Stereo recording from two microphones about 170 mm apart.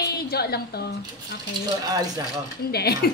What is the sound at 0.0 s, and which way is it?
Speech, 70° left (ahead or behind).